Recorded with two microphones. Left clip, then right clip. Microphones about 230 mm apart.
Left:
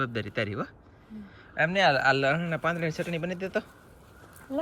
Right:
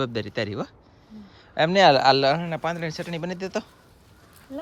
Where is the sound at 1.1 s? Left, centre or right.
Centre.